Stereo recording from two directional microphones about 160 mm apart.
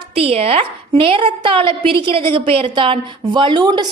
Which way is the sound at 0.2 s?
40° right (ahead or behind).